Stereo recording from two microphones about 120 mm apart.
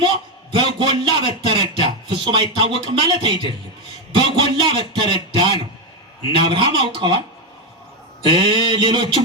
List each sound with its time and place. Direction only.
0.5 s speech: 45° right (ahead or behind)
4.4 s speech: 45° right (ahead or behind)
8.2 s speech: 45° right (ahead or behind)